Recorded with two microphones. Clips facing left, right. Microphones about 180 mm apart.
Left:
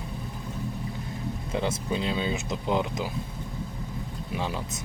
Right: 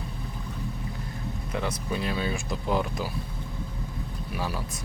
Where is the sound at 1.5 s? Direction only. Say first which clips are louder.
Left 2 dB; 25° left (ahead or behind).